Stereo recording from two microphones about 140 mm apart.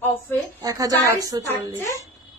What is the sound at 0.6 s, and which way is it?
Speech, 25° right (ahead or behind).